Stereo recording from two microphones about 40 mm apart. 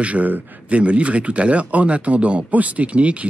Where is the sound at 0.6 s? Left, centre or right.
Right.